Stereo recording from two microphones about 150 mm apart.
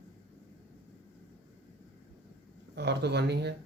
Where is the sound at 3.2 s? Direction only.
90° right.